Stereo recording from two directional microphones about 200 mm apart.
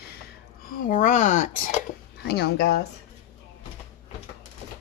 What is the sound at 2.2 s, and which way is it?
Speech, 55° left (ahead or behind).